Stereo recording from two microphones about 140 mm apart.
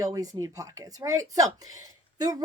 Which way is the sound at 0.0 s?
25° right (ahead or behind).